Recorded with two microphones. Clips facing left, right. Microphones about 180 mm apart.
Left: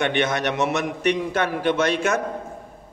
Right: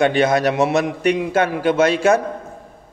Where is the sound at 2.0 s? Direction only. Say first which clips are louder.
Right 7 dB; 35° right (ahead or behind).